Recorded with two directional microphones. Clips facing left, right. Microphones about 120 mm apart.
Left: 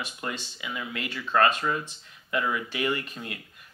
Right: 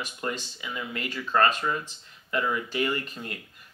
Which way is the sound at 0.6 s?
5° left (ahead or behind).